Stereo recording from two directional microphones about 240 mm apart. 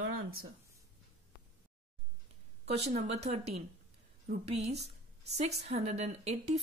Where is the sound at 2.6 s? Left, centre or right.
Right.